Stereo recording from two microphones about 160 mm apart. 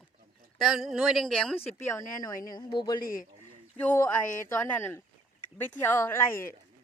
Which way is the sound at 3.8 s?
15° left (ahead or behind).